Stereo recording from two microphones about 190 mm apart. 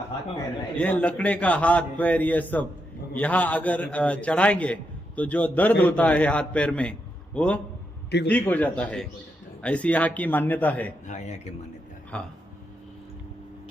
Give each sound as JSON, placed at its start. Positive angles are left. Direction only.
{"t": 0.8, "sound": "a man's voice", "side_deg": 5}
{"t": 11.0, "sound": "speech", "side_deg": 40}
{"t": 12.1, "sound": "a man's voice", "side_deg": 5}